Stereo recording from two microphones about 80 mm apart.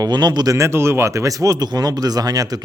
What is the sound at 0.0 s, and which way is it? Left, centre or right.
Speech, right.